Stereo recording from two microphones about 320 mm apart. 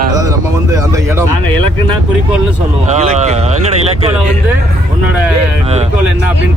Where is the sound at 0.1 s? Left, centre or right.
Centre.